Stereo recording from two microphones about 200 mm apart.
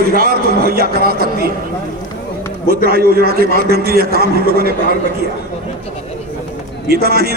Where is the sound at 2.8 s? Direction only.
50° right (ahead or behind).